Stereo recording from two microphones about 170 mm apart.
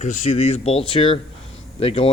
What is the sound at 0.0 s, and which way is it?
Speech, 45° left (ahead or behind).